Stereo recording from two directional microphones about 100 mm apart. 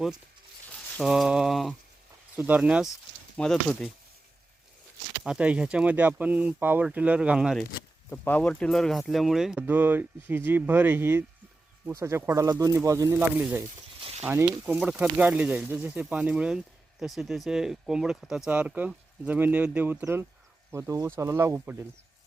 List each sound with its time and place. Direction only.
1.0 s speech: 5° right (ahead or behind)
2.3 s speech: 15° right (ahead or behind)
2.6 s speech: 5° right (ahead or behind)
3.3 s speech: 5° left (ahead or behind)
5.2 s speech: 10° right (ahead or behind)
8.1 s speech: 20° left (ahead or behind); by 9.6 s 5° right (ahead or behind)
9.6 s speech: 20° right (ahead or behind)
13.1 s speech: 15° right (ahead or behind)
14.0 s a sound: 90° right
14.3 s speech: 25° right (ahead or behind)
14.6 s speech: 10° right (ahead or behind)